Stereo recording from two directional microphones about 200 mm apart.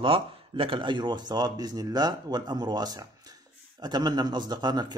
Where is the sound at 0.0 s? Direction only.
25° right (ahead or behind).